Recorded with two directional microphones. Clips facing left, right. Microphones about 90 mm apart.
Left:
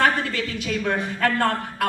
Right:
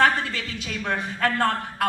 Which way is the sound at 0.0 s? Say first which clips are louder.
Even; 45° left (ahead or behind).